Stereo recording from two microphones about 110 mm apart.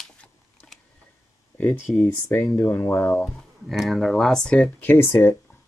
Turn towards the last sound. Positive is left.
turn(degrees=15)  # may be behind; listen again after turning